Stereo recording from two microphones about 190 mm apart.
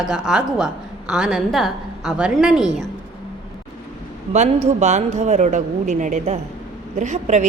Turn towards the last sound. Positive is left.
turn(degrees=-40)  # may be behind; listen again after turning